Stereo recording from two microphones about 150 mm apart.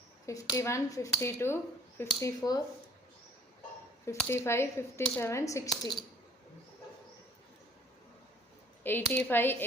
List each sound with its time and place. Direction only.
0.3 s speech: 20° left (ahead or behind)
4.0 s speech: 20° left (ahead or behind)
8.8 s speech: 15° left (ahead or behind)